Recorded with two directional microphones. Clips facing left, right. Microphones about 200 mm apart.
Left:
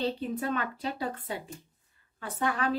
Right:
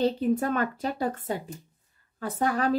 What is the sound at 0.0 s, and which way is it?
A woman's voice, 45° right (ahead or behind).